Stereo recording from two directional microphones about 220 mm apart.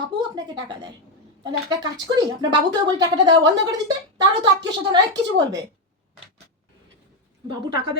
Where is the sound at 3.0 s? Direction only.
15° right (ahead or behind).